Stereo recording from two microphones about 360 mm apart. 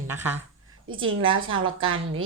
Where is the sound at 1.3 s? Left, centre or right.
Right.